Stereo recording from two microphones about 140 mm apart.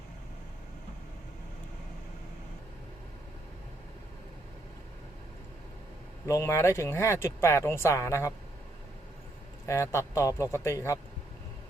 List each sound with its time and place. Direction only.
6.2 s speech: 20° left (ahead or behind)
9.6 s speech: 20° left (ahead or behind)